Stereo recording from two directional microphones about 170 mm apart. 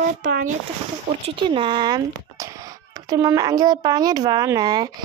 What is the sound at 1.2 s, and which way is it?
Speech, 30° right (ahead or behind).